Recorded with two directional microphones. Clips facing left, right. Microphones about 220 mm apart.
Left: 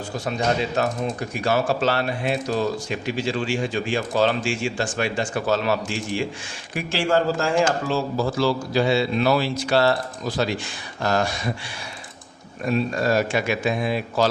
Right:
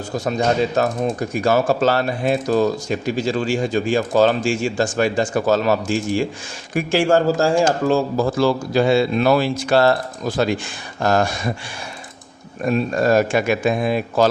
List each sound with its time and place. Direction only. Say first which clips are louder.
0.3 s speech: right 5 dB; 45° right (ahead or behind)
12.6 s speech: right 4 dB; 50° right (ahead or behind)